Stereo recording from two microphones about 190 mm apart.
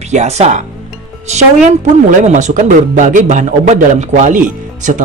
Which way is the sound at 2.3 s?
40° right (ahead or behind).